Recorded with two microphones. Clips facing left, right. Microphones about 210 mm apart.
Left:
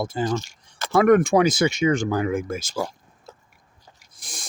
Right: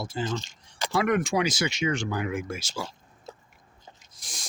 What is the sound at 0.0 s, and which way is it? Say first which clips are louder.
Speech: left 6 dB; 50° left (ahead or behind).